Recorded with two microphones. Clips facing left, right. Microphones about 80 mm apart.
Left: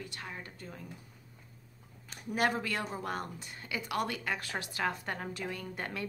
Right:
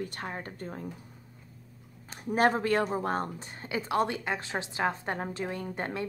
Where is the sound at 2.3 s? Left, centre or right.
Right.